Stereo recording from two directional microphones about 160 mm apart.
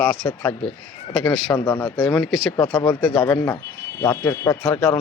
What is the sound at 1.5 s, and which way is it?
Speech, 20° left (ahead or behind).